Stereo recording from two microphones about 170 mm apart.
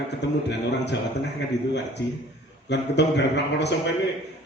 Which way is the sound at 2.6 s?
90° left.